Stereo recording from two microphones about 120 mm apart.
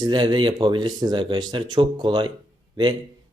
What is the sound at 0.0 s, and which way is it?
Speech, 40° right (ahead or behind).